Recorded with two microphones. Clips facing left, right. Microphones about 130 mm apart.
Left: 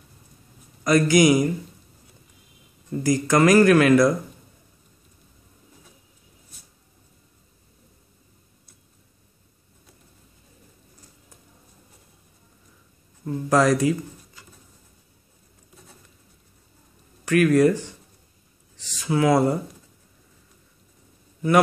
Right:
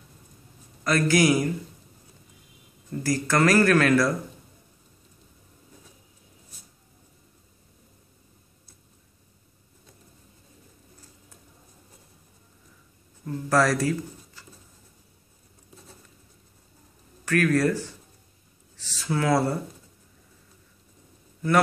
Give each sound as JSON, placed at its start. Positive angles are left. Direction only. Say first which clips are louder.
{"t": 0.8, "sound": "speech", "louder": "left 4 dB", "side_deg": 15}
{"t": 3.0, "sound": "speech", "louder": "left 4 dB", "side_deg": 15}
{"t": 13.5, "sound": "speech", "louder": "left 3 dB", "side_deg": 15}
{"t": 17.2, "sound": "speech", "louder": "left 5 dB", "side_deg": 15}